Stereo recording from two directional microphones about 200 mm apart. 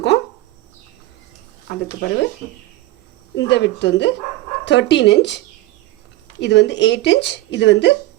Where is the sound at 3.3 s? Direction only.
60° left (ahead or behind).